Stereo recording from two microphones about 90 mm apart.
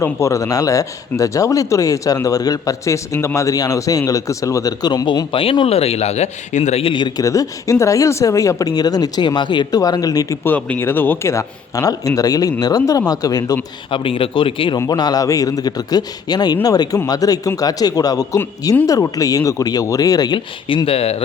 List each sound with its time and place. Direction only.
0.0 s speech: 35° left (ahead or behind)
5.3 s speech: 80° left
6.8 s a man's voice: 60° left (ahead or behind)
7.2 s speech: 35° left (ahead or behind); by 9.8 s 60° left (ahead or behind)
9.8 s a man's voice: 45° left (ahead or behind)
10.4 s speech: 20° left (ahead or behind); by 13.6 s 45° left (ahead or behind)
13.9 s speech: 80° left
14.8 s a man's voice: 50° left (ahead or behind)
20.7 s speech: 80° left